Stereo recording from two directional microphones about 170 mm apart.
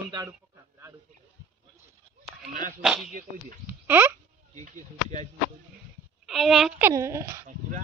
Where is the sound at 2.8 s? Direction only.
5° right (ahead or behind).